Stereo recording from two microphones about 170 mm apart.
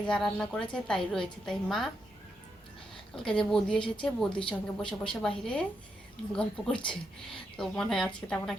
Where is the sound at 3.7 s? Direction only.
30° left (ahead or behind).